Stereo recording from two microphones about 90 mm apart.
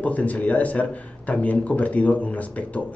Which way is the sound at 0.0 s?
15° left (ahead or behind).